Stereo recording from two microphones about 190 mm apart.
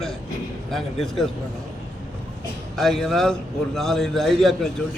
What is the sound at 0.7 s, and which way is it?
Speech, centre (ahead or behind).